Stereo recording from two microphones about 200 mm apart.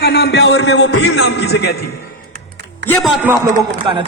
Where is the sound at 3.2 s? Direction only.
15° right (ahead or behind).